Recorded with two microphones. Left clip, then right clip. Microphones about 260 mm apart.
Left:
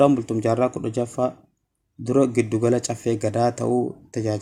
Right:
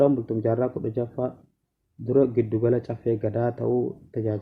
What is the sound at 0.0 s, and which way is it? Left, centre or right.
Speech, left.